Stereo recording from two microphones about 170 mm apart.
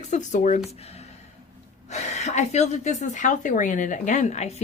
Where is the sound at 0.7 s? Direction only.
40° left (ahead or behind).